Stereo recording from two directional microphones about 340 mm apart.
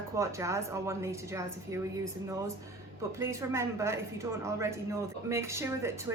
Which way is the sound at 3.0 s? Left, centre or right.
Centre.